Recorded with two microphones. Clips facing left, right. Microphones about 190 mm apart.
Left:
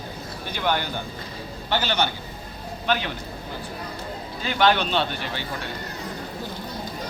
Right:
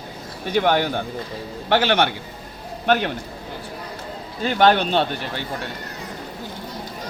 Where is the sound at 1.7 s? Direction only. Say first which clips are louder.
Right 6 dB; 85° right.